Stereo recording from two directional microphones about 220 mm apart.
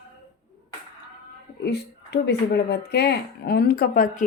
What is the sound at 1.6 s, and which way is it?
Speech, 50° left (ahead or behind).